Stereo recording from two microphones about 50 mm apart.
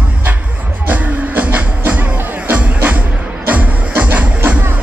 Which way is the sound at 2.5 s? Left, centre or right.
Right.